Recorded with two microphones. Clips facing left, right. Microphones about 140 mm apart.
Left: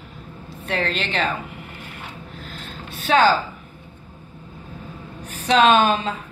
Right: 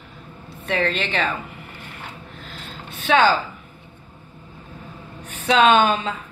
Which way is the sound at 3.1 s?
40° left (ahead or behind).